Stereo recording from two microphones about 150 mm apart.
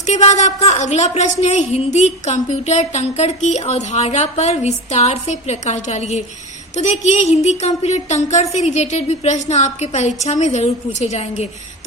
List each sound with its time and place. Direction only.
0.0 s a woman's voice: 50° left (ahead or behind)